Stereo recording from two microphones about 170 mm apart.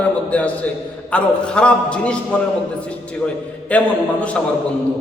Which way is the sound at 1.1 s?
5° left (ahead or behind).